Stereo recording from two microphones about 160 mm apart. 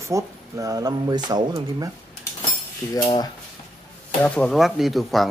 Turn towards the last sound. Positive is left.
turn(degrees=0)  # may be behind; listen again after turning